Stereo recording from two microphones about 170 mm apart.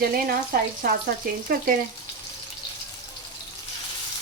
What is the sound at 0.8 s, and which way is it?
Frying, 65° right (ahead or behind).